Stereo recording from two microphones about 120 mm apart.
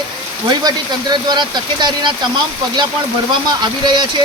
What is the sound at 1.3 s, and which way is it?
Speech, 40° right (ahead or behind).